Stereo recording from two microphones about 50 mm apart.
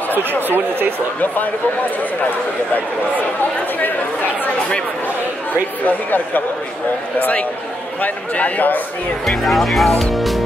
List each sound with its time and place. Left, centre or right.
0.1 s speech: right
5.9 s a man's voice: left
8.0 s a man's voice: left
9.2 s speech: centre